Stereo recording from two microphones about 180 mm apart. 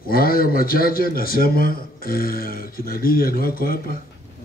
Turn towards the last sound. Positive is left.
turn(degrees=55)  # may be behind; listen again after turning